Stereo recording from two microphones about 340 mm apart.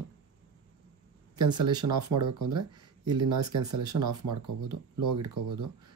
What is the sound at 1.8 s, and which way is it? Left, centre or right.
Speech, right.